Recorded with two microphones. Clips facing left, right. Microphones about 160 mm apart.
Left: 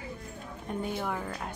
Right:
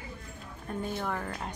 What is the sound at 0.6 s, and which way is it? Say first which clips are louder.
Speech: left 1 dB; 10° left (ahead or behind).